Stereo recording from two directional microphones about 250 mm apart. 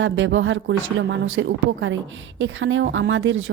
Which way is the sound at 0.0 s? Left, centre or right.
Right.